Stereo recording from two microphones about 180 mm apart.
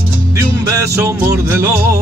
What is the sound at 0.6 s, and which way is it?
Music, 15° right (ahead or behind).